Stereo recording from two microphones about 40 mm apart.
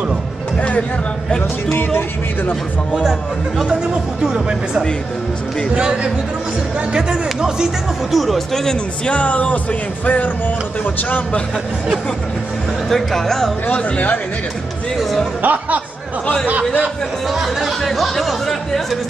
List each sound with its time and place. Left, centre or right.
0.6 s music: left
3.0 s speech: centre
8.1 s speech: centre
9.1 s music: left
11.0 s a man's voice: left
12.9 s speech: centre
13.9 s music: left
15.4 s speech: right
17.3 s speech: centre